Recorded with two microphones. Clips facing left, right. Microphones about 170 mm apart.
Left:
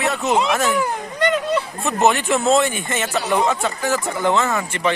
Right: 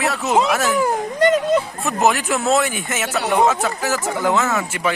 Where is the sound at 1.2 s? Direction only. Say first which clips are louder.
Right 3 dB; 45° right (ahead or behind).